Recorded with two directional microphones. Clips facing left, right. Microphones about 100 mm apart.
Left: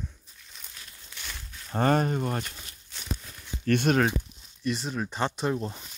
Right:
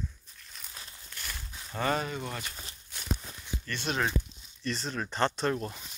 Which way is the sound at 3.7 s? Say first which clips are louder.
Left 10 dB; 55° left (ahead or behind).